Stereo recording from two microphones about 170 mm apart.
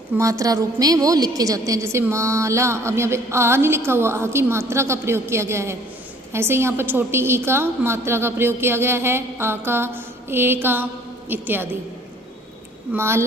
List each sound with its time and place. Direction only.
0.2 s a woman's voice: 20° right (ahead or behind)
12.9 s a woman's voice: 15° right (ahead or behind)